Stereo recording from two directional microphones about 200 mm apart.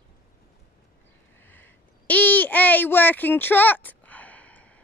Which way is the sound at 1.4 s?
10° left (ahead or behind).